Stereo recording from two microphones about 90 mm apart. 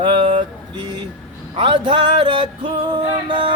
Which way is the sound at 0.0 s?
65° right (ahead or behind).